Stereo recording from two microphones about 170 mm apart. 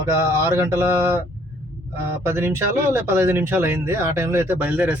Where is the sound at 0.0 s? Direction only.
15° right (ahead or behind).